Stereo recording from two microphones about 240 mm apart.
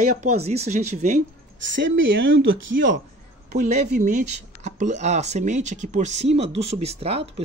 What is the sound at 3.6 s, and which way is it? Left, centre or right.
Speech, right.